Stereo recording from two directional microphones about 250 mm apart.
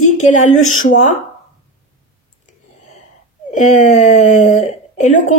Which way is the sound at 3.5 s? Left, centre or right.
Left.